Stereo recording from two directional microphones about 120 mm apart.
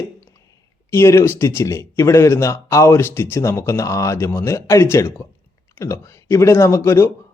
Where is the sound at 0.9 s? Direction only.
20° left (ahead or behind).